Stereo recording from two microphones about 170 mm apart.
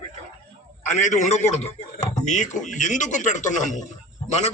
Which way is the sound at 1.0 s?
45° left (ahead or behind).